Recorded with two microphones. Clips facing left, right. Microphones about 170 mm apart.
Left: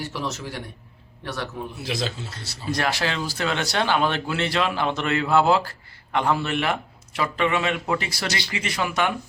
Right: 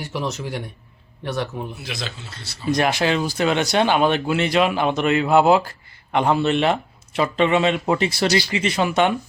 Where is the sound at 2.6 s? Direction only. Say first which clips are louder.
Right 5 dB; 20° right (ahead or behind).